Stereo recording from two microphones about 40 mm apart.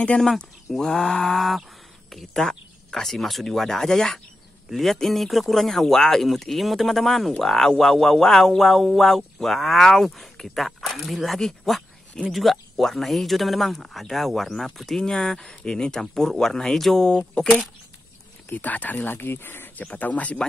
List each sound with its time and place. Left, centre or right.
0.7 s a man's voice: centre
15.0 s speech: centre
18.5 s speech: left
19.0 s speech: left
19.7 s speech: left